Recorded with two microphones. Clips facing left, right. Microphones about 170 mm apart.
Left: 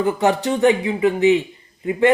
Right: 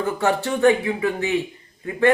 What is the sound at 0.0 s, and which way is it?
A woman's voice, 15° left (ahead or behind).